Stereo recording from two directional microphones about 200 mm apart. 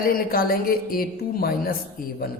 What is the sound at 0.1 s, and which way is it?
Speech, 45° left (ahead or behind).